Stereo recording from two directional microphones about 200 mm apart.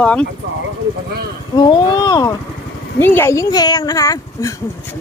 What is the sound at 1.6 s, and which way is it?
Speech, 20° left (ahead or behind).